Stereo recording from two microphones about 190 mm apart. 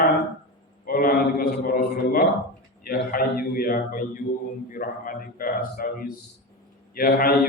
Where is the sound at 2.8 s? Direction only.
50° left (ahead or behind).